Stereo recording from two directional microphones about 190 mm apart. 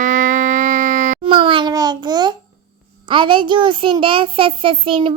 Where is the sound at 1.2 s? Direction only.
25° right (ahead or behind).